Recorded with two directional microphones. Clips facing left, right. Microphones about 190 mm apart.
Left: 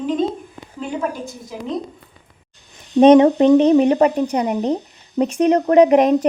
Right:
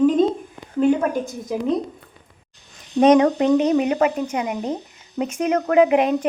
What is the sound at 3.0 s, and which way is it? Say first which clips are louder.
A woman's voice: left 5 dB; 25° left (ahead or behind).